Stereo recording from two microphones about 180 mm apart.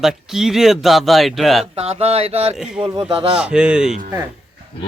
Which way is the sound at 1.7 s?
35° right (ahead or behind).